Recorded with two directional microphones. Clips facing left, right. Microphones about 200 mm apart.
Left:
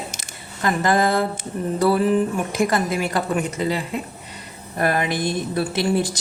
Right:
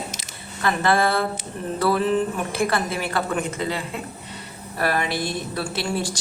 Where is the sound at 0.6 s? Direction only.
15° left (ahead or behind).